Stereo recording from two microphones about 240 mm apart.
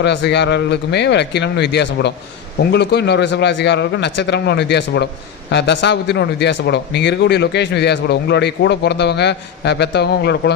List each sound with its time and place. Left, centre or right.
0.0 s speech: left